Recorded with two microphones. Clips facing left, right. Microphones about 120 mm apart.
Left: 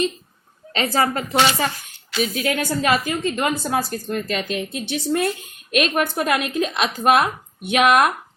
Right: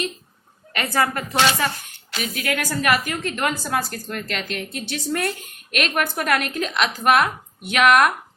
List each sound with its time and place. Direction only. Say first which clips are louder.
0.7 s a woman's voice: left 2 dB; 25° left (ahead or behind)